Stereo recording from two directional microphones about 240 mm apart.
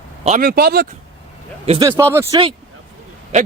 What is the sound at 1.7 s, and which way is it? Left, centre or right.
A man's voice, centre.